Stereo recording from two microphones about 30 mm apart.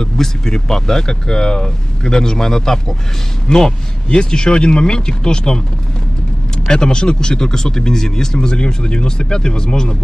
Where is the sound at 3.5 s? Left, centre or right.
Left.